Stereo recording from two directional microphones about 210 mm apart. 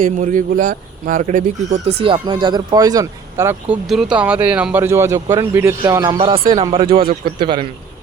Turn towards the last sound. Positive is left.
turn(degrees=-25)  # may be behind; listen again after turning